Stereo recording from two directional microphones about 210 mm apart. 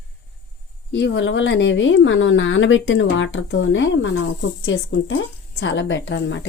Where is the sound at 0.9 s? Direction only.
55° left (ahead or behind).